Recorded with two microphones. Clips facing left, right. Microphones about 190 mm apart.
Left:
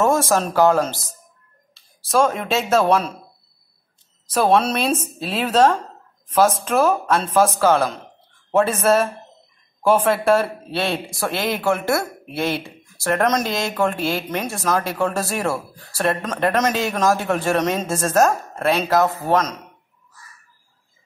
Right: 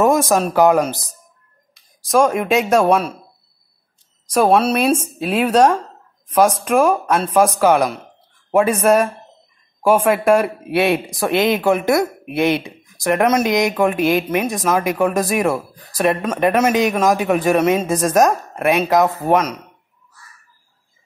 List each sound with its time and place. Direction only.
0.0 s speech: 15° right (ahead or behind)
4.3 s speech: 10° right (ahead or behind)